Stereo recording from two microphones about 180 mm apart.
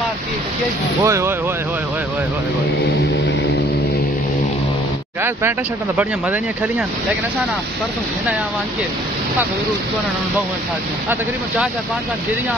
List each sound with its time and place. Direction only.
1.0 s speech: 15° right (ahead or behind)
5.9 s speech: 10° right (ahead or behind)
11.1 s speech: 5° right (ahead or behind)